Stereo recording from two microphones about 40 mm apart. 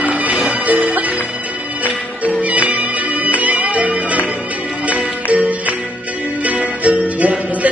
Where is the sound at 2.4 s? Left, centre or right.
Right.